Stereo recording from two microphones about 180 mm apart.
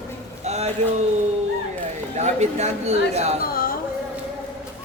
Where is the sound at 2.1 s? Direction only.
40° right (ahead or behind).